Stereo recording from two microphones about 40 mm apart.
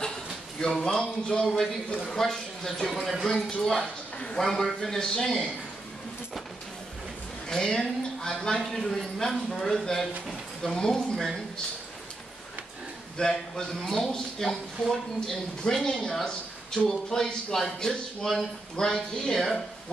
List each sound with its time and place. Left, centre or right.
0.0 s speech: centre
2.0 s a man's voice: centre
7.4 s a man's voice: centre
13.2 s a man's voice: centre
15.6 s a man's voice: left